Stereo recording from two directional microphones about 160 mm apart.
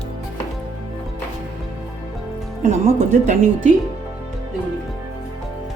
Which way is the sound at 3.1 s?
55° right (ahead or behind).